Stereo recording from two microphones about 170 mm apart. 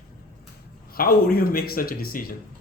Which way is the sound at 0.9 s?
60° left (ahead or behind).